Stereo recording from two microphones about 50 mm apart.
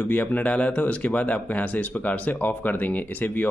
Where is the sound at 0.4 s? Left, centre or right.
Left.